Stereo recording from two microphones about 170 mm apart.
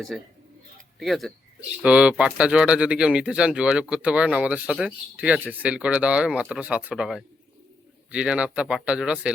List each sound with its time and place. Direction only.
0.1 s speech: centre (ahead or behind)